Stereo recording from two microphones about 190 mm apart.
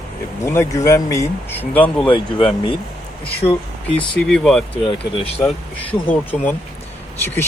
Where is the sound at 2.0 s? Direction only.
25° left (ahead or behind).